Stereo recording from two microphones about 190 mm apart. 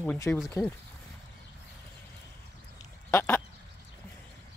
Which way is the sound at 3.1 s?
10° left (ahead or behind).